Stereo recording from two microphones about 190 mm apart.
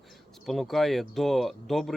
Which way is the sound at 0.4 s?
Centre (ahead or behind).